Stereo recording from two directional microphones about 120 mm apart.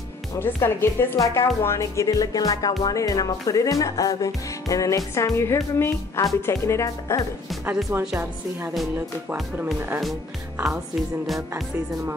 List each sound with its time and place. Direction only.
0.4 s speech: 20° left (ahead or behind)
7.6 s music: 15° right (ahead or behind)
11.2 s music: centre (ahead or behind)